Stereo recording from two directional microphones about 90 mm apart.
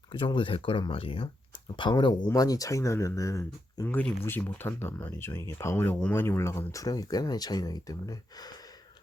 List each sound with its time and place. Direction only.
0.1 s speech: 70° left (ahead or behind); by 1.3 s 90° left
1.8 s speech: 60° left (ahead or behind)
2.3 s speech: 45° left (ahead or behind)
3.8 s speech: 20° left (ahead or behind); by 8.5 s 45° left (ahead or behind)